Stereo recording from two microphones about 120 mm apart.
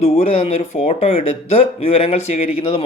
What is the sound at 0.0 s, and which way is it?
A man's voice, 65° left (ahead or behind).